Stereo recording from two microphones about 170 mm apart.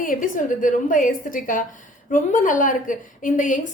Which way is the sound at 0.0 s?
55° left (ahead or behind).